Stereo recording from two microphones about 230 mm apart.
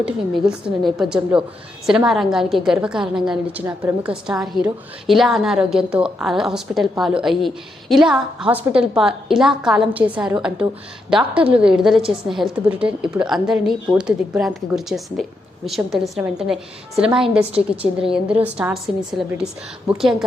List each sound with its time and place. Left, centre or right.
0.0 s a woman's voice: centre